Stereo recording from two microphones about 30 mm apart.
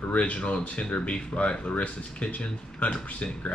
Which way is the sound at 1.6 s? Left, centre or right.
Left.